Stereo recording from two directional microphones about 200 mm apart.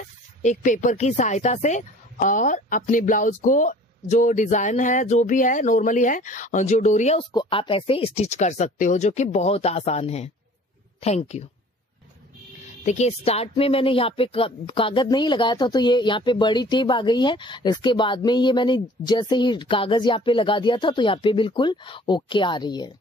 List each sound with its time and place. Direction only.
0.4 s speech: 40° left (ahead or behind)
12.8 s speech: 35° left (ahead or behind)